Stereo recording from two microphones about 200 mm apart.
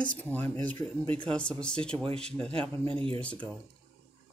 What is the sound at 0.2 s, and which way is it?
Speech, 10° left (ahead or behind).